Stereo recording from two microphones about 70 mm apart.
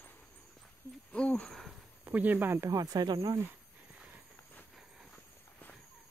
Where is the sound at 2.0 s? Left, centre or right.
Right.